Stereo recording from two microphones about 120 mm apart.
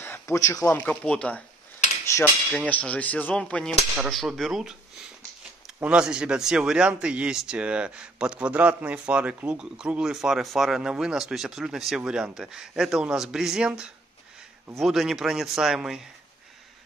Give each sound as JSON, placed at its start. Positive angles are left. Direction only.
{"t": 0.0, "sound": "a sound", "side_deg": 20}
{"t": 0.5, "sound": "speech", "side_deg": 30}
{"t": 0.7, "sound": "cutlery", "side_deg": 10}
{"t": 2.0, "sound": "cutlery", "side_deg": 25}
{"t": 2.5, "sound": "cutlery", "side_deg": 10}
{"t": 4.1, "sound": "a man's voice", "side_deg": 0}
{"t": 5.8, "sound": "a man's voice", "side_deg": -10}